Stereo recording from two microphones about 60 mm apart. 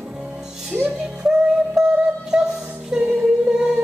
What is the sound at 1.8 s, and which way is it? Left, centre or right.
Music, centre.